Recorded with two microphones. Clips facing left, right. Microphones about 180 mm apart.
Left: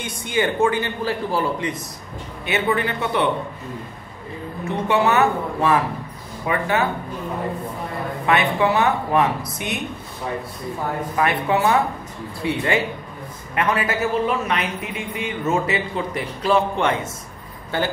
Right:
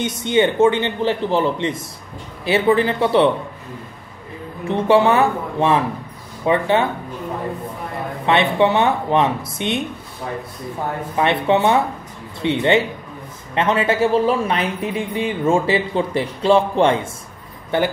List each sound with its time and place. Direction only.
0.0 s speech: 25° right (ahead or behind)
4.6 s speech: 30° right (ahead or behind)
8.3 s speech: 25° right (ahead or behind)
11.1 s speech: 25° right (ahead or behind)